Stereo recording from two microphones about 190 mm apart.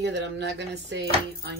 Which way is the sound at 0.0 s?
65° right (ahead or behind).